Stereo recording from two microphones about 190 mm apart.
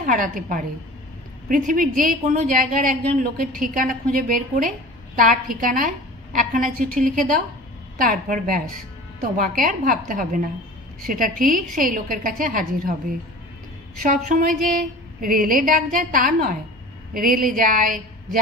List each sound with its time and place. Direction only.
0.0 s a woman's voice: 45° right (ahead or behind)
14.0 s a woman's voice: 45° right (ahead or behind)